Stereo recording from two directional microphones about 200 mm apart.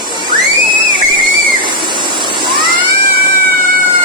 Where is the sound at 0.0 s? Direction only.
20° right (ahead or behind).